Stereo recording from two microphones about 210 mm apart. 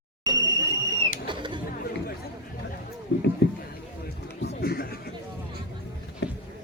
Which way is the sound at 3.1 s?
60° left (ahead or behind).